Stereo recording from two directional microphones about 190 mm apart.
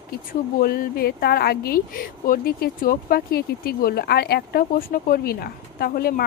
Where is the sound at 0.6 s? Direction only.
55° left (ahead or behind).